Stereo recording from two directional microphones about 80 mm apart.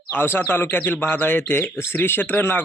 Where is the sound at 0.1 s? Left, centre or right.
Left.